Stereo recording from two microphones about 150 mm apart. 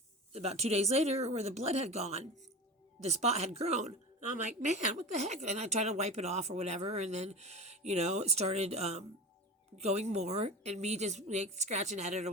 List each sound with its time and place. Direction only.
0.3 s a woman's voice: 45° right (ahead or behind)